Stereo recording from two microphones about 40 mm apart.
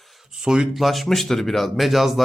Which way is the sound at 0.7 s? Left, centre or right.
Centre.